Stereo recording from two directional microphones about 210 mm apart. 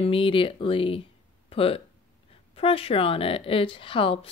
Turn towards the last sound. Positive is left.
turn(degrees=25)  # may be behind; listen again after turning